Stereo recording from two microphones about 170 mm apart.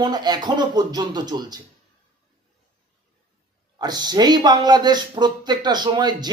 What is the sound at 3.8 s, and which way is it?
Speech, 25° right (ahead or behind).